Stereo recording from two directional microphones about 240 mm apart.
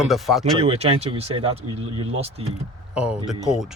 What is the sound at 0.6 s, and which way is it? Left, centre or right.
Speech, right.